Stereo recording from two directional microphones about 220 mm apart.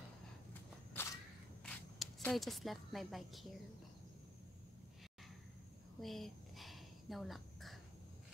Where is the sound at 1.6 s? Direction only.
5° left (ahead or behind).